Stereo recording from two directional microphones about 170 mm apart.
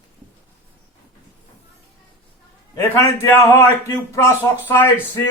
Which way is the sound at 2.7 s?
15° left (ahead or behind).